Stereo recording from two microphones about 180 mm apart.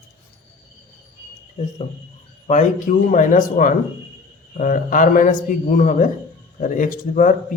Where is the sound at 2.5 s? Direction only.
45° left (ahead or behind).